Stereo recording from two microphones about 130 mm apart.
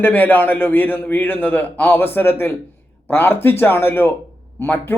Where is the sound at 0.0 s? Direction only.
15° left (ahead or behind).